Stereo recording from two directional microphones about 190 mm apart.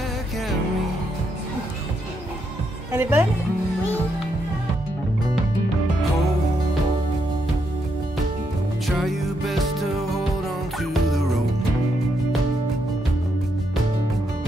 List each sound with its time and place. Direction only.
2.9 s a woman's voice: 10° right (ahead or behind)
8.8 s music: centre (ahead or behind)